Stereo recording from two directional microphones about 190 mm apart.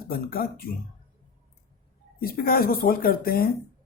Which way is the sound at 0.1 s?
50° left (ahead or behind).